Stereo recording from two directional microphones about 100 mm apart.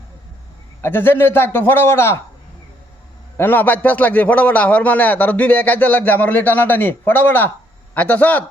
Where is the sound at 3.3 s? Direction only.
20° left (ahead or behind).